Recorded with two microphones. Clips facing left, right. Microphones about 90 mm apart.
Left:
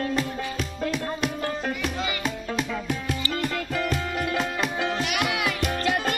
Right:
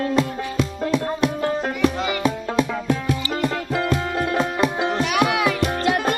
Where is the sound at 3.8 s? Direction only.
30° right (ahead or behind).